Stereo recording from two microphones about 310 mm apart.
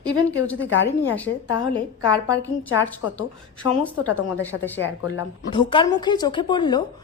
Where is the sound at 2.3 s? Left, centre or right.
Centre.